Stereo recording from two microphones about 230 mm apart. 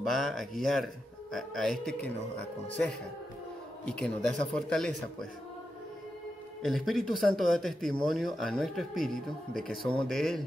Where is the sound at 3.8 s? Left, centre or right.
Centre.